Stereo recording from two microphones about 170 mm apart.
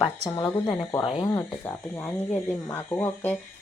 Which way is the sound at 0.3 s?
20° left (ahead or behind).